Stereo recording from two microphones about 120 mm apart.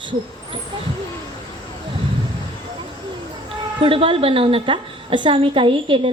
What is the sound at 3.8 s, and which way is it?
A woman's voice, 50° right (ahead or behind).